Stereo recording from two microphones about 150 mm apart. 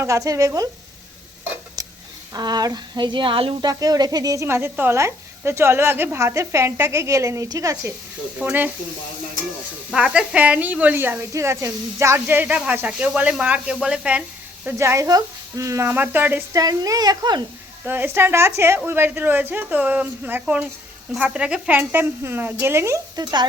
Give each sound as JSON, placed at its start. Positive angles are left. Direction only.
{"t": 0.0, "sound": "a woman's voice", "side_deg": -20}
{"t": 2.3, "sound": "a woman's voice", "side_deg": -25}
{"t": 3.7, "sound": "a woman's voice", "side_deg": -25}
{"t": 8.4, "sound": "speech", "side_deg": -10}
{"t": 9.9, "sound": "a woman's voice", "side_deg": -5}
{"t": 17.8, "sound": "speech", "side_deg": -15}
{"t": 23.2, "sound": "a woman's voice", "side_deg": -30}